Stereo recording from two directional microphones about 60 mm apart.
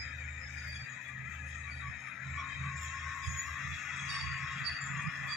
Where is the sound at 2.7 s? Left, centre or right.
Centre.